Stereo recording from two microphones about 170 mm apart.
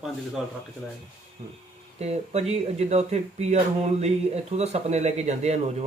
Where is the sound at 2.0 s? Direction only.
40° right (ahead or behind).